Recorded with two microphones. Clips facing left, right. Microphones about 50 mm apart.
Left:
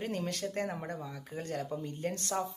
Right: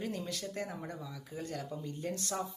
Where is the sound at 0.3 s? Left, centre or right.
Left.